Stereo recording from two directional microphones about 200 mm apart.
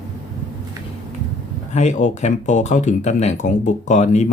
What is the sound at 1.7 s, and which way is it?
Speech, 35° left (ahead or behind).